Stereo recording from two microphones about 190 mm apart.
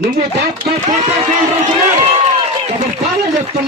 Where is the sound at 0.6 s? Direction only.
40° right (ahead or behind).